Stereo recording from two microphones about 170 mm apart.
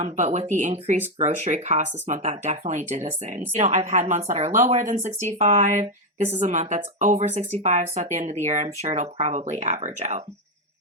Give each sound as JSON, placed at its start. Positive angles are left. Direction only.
{"t": 0.0, "sound": "a woman's voice", "side_deg": -40}